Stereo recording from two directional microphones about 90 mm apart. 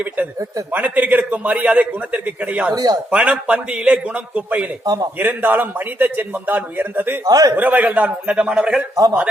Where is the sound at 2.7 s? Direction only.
45° right (ahead or behind).